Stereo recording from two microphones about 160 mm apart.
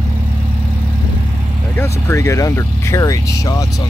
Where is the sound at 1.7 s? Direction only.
15° left (ahead or behind).